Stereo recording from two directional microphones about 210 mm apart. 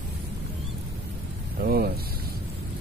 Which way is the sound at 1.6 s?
45° right (ahead or behind).